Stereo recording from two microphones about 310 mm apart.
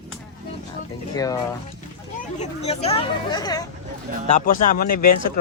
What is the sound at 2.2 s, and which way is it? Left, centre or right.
Speech, left.